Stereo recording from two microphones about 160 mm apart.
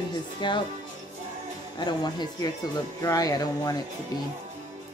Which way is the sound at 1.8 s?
25° left (ahead or behind).